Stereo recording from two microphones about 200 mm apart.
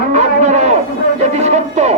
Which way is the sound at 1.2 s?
35° right (ahead or behind).